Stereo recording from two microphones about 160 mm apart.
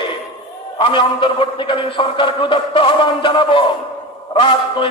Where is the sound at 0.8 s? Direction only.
30° left (ahead or behind).